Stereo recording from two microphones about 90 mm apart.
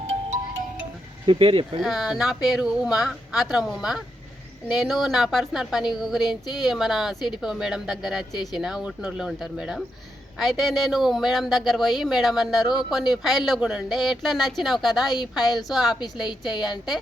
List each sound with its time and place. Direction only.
1.3 s speech: 75° right (ahead or behind)
1.8 s speech: 5° right (ahead or behind)